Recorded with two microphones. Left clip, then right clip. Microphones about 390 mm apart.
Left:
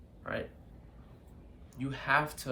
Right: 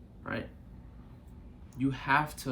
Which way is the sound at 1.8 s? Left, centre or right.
Centre.